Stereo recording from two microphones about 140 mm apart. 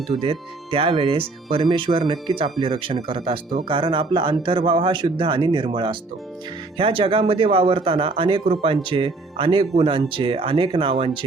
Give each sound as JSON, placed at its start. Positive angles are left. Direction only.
{"t": 0.1, "sound": "speech", "side_deg": -40}